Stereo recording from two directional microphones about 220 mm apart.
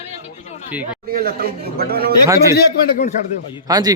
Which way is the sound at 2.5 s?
40° left (ahead or behind).